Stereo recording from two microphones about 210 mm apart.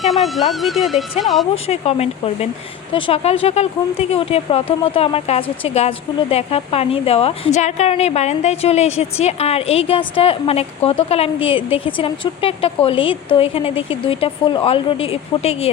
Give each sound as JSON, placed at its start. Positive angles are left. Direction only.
{"t": 0.0, "sound": "speech", "side_deg": 0}
{"t": 1.6, "sound": "a woman's voice", "side_deg": 30}